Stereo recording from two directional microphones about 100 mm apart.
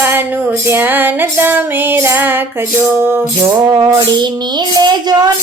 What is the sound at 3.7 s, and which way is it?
Child singing, 45° right (ahead or behind).